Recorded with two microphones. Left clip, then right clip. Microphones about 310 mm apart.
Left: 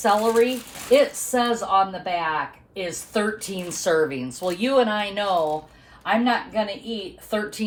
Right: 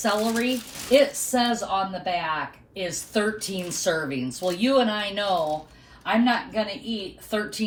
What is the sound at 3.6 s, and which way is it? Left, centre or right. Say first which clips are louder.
Speech: left 5 dB; left.